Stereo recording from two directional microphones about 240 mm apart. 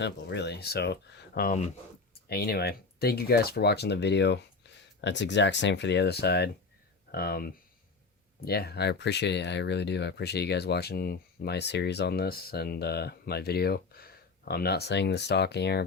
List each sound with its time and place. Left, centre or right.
0.0 s speech: left